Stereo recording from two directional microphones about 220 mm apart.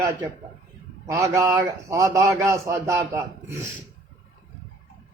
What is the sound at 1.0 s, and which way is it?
A man's voice, 15° right (ahead or behind).